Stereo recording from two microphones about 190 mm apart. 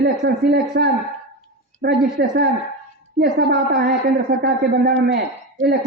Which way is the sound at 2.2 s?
55° right (ahead or behind).